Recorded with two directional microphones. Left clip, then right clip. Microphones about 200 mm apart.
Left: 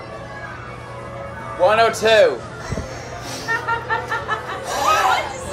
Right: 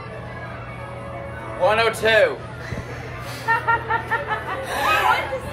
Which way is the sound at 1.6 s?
60° left (ahead or behind).